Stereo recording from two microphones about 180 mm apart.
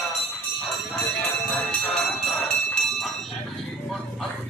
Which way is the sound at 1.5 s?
5° left (ahead or behind).